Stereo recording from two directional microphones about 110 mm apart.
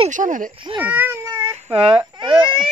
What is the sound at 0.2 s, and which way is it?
Speech, 80° right.